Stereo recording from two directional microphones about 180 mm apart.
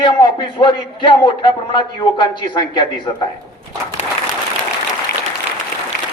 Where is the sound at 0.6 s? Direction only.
25° left (ahead or behind).